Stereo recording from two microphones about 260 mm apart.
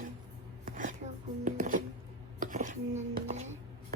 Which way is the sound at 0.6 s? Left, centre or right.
Right.